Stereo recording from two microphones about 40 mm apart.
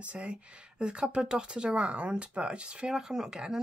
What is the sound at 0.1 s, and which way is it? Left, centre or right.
Speech, right.